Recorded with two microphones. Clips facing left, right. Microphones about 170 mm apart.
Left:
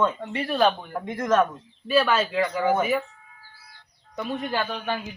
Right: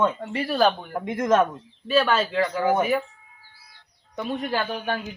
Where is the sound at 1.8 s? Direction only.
5° left (ahead or behind).